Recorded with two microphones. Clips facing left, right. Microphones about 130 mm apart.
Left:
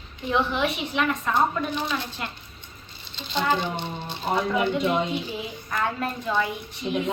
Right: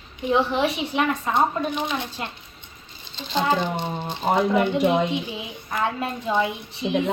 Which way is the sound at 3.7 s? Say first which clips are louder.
Right 4 dB; 45° right (ahead or behind).